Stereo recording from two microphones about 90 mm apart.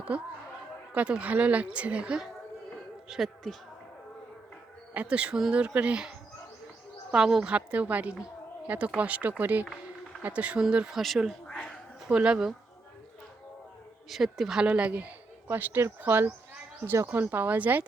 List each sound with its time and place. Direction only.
0.1 s speech: 15° right (ahead or behind)
4.9 s a woman's voice: 15° right (ahead or behind)
11.4 s a sound: 5° left (ahead or behind)
12.0 s speech: 10° right (ahead or behind)
14.1 s speech: centre (ahead or behind); by 17.8 s 20° right (ahead or behind)